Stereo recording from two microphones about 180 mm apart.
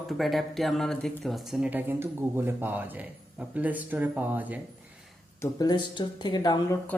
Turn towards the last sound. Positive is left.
turn(degrees=20)  # may be behind; listen again after turning